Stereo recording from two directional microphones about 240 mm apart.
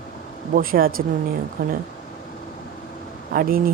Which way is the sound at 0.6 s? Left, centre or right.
Right.